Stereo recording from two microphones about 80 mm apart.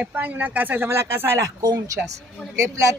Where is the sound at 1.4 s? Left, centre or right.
Right.